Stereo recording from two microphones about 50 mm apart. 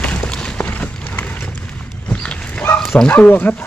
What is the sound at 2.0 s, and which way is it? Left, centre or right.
Dog, left.